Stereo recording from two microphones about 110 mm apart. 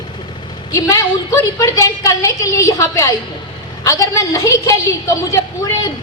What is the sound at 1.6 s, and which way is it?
A woman's voice, 30° left (ahead or behind).